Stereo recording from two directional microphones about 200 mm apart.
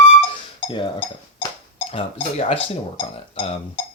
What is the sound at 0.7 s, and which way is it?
Speech, 25° left (ahead or behind).